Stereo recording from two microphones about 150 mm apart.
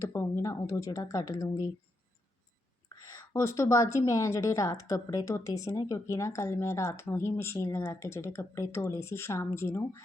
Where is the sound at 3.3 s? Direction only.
20° left (ahead or behind).